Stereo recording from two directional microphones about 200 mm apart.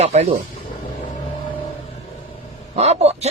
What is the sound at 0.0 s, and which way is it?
Speech, 30° right (ahead or behind).